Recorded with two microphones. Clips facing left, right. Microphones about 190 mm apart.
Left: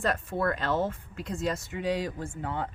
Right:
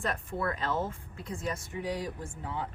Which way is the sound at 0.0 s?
75° left (ahead or behind).